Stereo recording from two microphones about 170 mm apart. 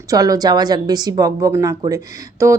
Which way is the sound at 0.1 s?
20° right (ahead or behind).